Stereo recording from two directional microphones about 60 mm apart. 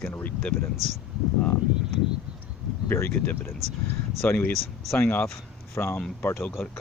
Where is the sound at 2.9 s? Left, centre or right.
Left.